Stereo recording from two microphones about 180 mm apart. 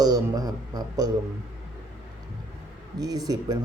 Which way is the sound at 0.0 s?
20° right (ahead or behind).